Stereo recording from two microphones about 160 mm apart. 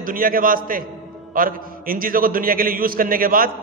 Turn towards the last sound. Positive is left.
turn(degrees=-65)  # may be behind; listen again after turning